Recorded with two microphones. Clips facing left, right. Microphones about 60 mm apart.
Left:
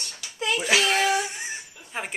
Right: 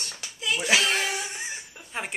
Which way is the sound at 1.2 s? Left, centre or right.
Centre.